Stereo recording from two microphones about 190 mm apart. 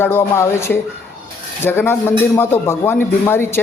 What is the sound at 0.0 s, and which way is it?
A man's voice, 10° left (ahead or behind).